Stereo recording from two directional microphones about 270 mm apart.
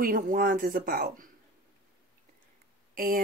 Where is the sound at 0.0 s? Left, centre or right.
Right.